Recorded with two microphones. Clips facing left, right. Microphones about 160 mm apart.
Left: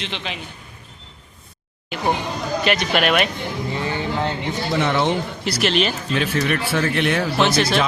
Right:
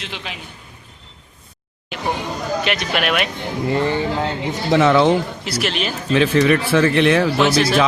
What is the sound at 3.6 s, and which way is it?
Speech, 60° right (ahead or behind).